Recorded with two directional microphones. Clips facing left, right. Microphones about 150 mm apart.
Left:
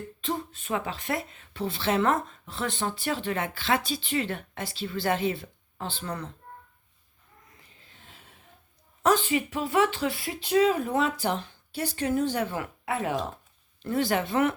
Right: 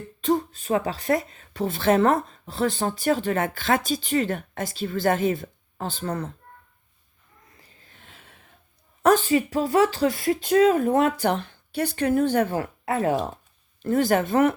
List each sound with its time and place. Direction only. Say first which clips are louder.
0.2 s speech: right 10 dB; 45° right (ahead or behind)
9.0 s speech: right 5 dB; 40° right (ahead or behind)
12.5 s a woman's voice: right 5 dB; 40° right (ahead or behind)